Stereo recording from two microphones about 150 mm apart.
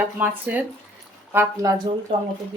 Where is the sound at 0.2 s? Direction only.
10° right (ahead or behind).